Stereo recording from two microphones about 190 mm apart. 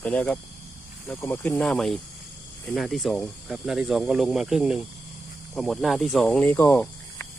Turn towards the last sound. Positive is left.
turn(degrees=10)  # may be behind; listen again after turning